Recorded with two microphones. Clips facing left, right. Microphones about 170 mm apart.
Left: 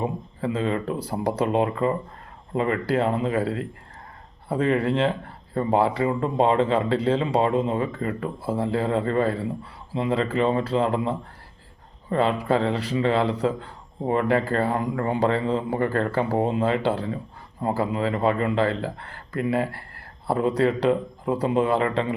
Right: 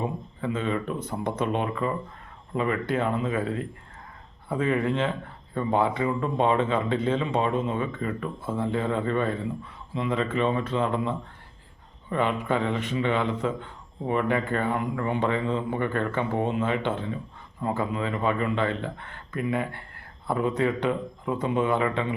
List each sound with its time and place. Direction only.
0.0 s speech: 35° left (ahead or behind)